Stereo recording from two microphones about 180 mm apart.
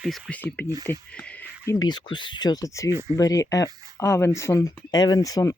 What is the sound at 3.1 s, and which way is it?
Speech, 20° left (ahead or behind).